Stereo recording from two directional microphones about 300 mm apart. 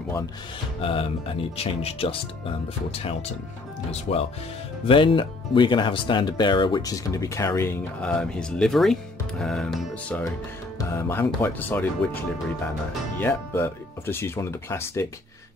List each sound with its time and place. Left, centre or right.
0.7 s speech: centre
13.2 s speech: centre